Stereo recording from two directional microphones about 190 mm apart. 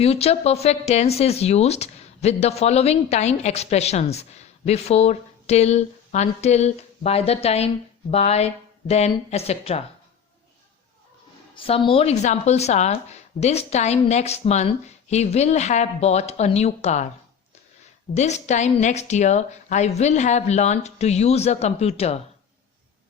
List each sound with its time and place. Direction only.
0.0 s speech: 35° left (ahead or behind)
11.5 s speech: 30° left (ahead or behind)
18.1 s speech: 35° left (ahead or behind)